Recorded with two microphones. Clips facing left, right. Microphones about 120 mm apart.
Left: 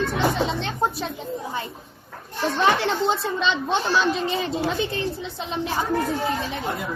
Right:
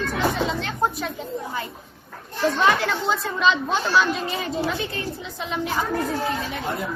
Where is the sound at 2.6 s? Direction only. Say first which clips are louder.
Left 3 dB; 30° left (ahead or behind).